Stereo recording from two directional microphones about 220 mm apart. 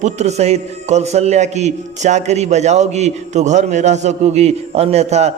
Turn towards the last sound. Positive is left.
turn(degrees=-30)  # may be behind; listen again after turning